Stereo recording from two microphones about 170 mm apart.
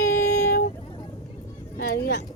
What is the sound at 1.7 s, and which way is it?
Speech, 65° left (ahead or behind).